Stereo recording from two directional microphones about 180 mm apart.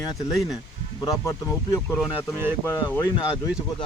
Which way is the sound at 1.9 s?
Centre (ahead or behind).